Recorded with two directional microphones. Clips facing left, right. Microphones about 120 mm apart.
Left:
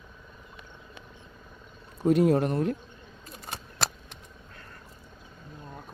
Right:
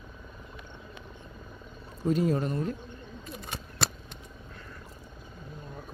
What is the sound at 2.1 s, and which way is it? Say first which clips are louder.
Speech: left 5 dB; 65° left (ahead or behind).